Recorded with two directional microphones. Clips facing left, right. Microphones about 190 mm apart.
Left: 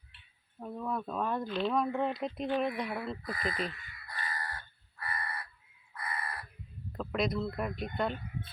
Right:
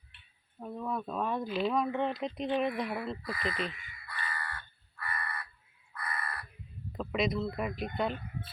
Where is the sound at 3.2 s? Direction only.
45° left (ahead or behind).